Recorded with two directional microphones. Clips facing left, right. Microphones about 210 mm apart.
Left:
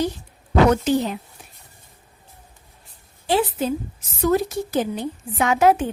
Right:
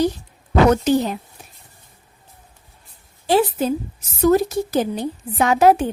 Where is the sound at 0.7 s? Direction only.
40° right (ahead or behind).